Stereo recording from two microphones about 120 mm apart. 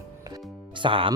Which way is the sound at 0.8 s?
45° right (ahead or behind).